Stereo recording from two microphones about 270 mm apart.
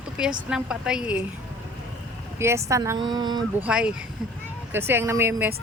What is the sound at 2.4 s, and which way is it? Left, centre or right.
Speech, centre.